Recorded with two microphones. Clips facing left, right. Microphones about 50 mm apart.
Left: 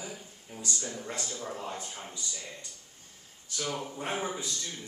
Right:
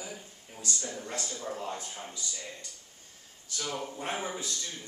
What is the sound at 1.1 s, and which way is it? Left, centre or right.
Speech, left.